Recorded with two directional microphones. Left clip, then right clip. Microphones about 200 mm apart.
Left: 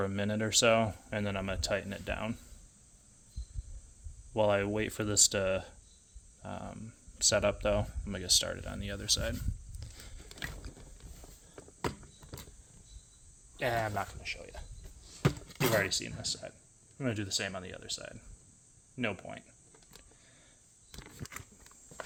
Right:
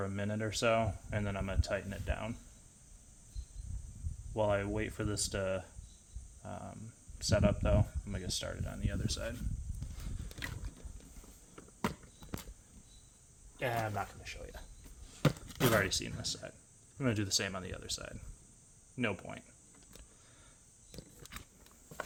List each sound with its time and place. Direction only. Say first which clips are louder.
0.0 s speech: left 5 dB; 45° left (ahead or behind)
4.4 s speech: left 4 dB; 50° left (ahead or behind)
13.6 s speech: left 3 dB; 50° left (ahead or behind)
15.5 s speech: left 1 dB; centre (ahead or behind)